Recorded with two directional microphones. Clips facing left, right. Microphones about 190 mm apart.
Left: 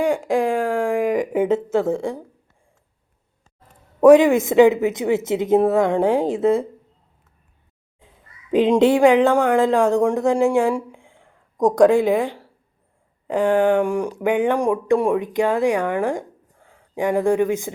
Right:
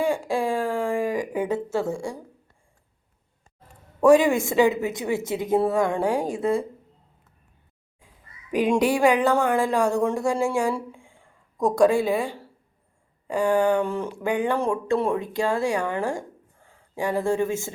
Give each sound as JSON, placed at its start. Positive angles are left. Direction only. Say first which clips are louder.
{"t": 0.0, "sound": "a woman's voice", "louder": "left 5 dB", "side_deg": 15}
{"t": 4.0, "sound": "a woman's voice", "louder": "left 5 dB", "side_deg": 20}
{"t": 8.0, "sound": "a woman's voice", "louder": "left 2 dB", "side_deg": 20}